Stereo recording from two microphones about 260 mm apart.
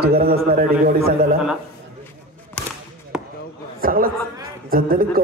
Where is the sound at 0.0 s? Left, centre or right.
Right.